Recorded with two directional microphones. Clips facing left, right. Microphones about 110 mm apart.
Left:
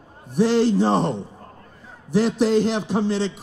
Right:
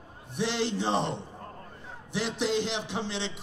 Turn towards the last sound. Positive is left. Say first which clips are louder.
# left 11 dB
turn(degrees=45)  # may be behind; listen again after turning